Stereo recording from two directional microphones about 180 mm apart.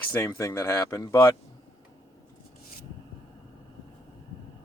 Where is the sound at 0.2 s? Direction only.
15° left (ahead or behind).